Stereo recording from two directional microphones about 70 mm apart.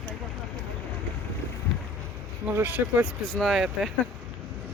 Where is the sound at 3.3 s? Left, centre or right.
Centre.